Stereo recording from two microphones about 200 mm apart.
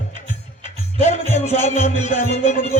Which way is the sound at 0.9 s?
35° left (ahead or behind).